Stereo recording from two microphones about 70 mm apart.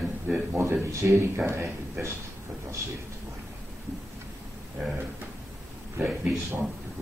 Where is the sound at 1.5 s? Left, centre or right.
Right.